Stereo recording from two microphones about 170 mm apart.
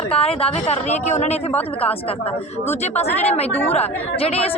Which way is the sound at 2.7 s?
40° left (ahead or behind).